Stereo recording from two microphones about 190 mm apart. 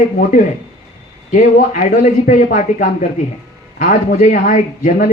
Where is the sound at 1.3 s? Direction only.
45° left (ahead or behind).